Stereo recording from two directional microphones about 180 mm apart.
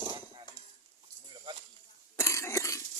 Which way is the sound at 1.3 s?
25° right (ahead or behind).